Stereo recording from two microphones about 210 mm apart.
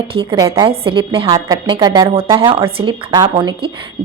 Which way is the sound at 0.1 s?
25° right (ahead or behind).